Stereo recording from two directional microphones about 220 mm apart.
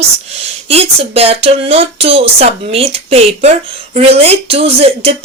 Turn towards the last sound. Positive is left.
turn(degrees=-25)  # may be behind; listen again after turning